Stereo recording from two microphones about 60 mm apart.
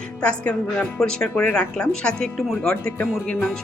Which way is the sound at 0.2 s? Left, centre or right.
Centre.